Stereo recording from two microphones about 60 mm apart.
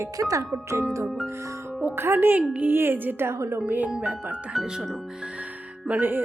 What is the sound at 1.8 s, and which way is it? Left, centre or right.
Speech, right.